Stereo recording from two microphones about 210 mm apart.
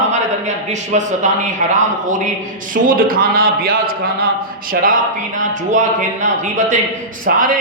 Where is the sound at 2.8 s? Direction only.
40° right (ahead or behind).